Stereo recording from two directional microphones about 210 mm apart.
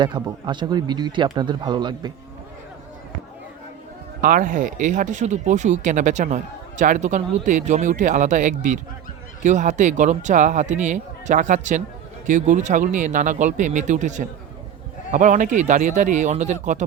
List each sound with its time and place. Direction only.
0.0 s speech: 20° right (ahead or behind)
4.2 s speech: 40° right (ahead or behind)